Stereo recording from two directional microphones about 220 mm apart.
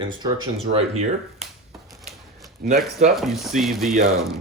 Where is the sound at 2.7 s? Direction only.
35° right (ahead or behind).